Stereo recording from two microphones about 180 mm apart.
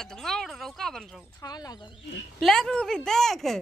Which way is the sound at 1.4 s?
20° left (ahead or behind).